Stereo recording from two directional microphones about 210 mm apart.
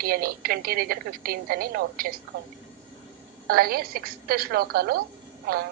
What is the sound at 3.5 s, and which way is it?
A woman's voice, 45° right (ahead or behind).